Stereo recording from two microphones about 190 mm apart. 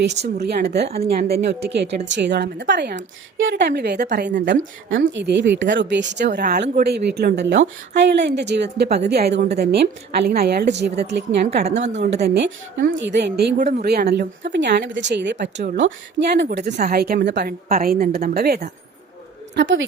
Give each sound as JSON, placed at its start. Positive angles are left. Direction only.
{"t": 0.3, "sound": "a woman's voice", "side_deg": -60}
{"t": 4.4, "sound": "speech", "side_deg": -75}
{"t": 6.4, "sound": "a woman's voice", "side_deg": -50}
{"t": 11.6, "sound": "a woman's voice", "side_deg": -35}
{"t": 12.1, "sound": "a woman's voice", "side_deg": -65}
{"t": 13.6, "sound": "a woman's voice", "side_deg": -40}
{"t": 13.8, "sound": "a woman's voice", "side_deg": -55}
{"t": 15.5, "sound": "a woman's voice", "side_deg": -50}
{"t": 15.8, "sound": "a woman's voice", "side_deg": -65}
{"t": 16.6, "sound": "a woman's voice", "side_deg": -40}
{"t": 16.9, "sound": "a woman's voice", "side_deg": -55}
{"t": 19.5, "sound": "speech", "side_deg": -75}